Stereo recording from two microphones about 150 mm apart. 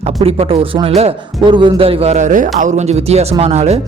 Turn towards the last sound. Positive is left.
turn(degrees=-45)  # may be behind; listen again after turning